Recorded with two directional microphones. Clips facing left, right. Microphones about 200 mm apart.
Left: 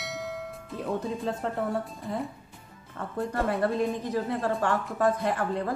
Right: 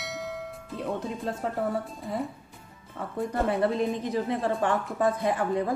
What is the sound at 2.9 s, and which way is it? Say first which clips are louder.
A woman's voice: right 1 dB; 15° right (ahead or behind).